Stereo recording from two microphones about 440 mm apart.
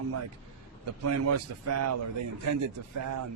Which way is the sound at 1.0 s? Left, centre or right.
Right.